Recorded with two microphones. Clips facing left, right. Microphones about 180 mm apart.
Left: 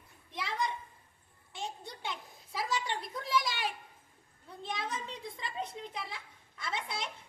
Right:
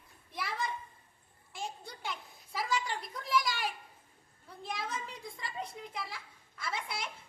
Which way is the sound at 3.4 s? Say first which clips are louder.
Even; 25° left (ahead or behind).